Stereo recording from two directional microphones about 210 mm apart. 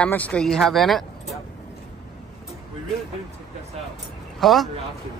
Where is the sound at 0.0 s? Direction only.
5° left (ahead or behind).